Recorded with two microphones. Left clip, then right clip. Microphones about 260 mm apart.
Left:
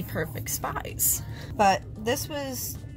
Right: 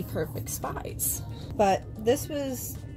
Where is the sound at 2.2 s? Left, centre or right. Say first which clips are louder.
Right 1 dB; left.